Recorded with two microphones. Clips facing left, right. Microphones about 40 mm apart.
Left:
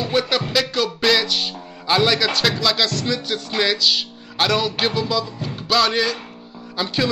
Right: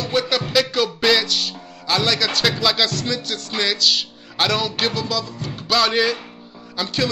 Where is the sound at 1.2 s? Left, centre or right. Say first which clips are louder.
Left 1 dB; centre.